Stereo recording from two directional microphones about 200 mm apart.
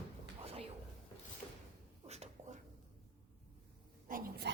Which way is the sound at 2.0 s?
30° right (ahead or behind).